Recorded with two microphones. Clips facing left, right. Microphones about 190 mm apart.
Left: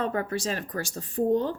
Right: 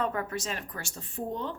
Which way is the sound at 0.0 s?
35° left (ahead or behind).